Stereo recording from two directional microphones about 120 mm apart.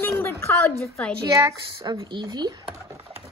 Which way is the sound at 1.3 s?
30° right (ahead or behind).